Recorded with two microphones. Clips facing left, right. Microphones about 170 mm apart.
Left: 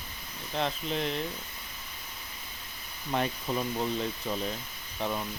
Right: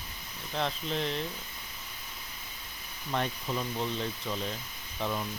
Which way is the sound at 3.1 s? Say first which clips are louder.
Left 2 dB; 5° left (ahead or behind).